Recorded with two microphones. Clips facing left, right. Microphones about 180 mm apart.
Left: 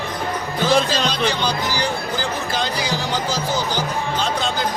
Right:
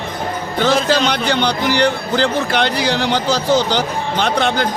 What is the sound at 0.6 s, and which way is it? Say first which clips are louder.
Speech: right 3 dB; 70° right (ahead or behind).